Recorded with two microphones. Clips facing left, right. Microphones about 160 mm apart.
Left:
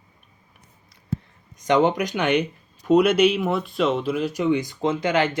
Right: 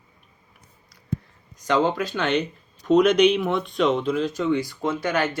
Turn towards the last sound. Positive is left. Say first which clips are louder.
# left 2 dB
turn(degrees=20)  # may be behind; listen again after turning